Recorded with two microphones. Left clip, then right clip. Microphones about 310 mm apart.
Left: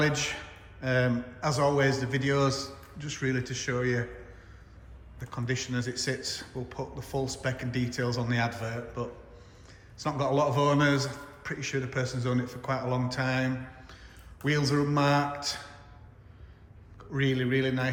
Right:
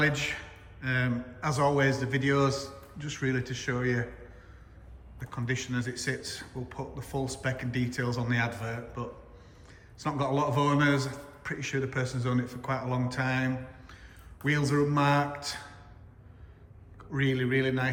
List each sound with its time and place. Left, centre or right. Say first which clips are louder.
0.0 s a man's voice: even; centre
5.2 s a man's voice: left 1 dB; centre
17.0 s a man's voice: even; centre